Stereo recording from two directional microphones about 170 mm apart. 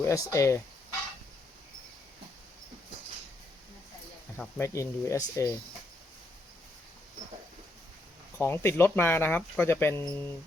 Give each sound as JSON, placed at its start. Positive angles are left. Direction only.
{"t": 0.0, "sound": "speech", "side_deg": 15}
{"t": 4.4, "sound": "speech", "side_deg": 15}
{"t": 8.4, "sound": "speech", "side_deg": 15}